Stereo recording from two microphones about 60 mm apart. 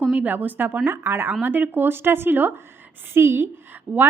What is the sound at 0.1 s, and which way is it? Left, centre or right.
A woman's voice, right.